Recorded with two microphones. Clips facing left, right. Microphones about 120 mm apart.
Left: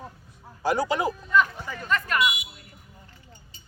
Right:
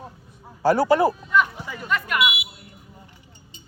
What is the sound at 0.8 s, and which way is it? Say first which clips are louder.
Speech: right 8 dB; 40° right (ahead or behind).